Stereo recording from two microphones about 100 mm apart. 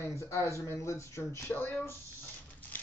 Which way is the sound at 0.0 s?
25° left (ahead or behind).